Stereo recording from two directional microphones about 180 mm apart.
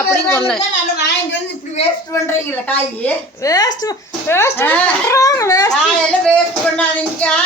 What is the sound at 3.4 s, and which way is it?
A woman's voice, 20° left (ahead or behind).